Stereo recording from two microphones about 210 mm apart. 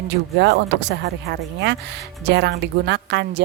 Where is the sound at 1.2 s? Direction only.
55° right (ahead or behind).